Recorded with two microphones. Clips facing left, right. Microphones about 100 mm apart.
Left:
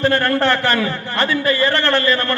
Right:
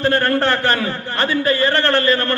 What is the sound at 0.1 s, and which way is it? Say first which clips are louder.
A man's voice: even; 40° right (ahead or behind).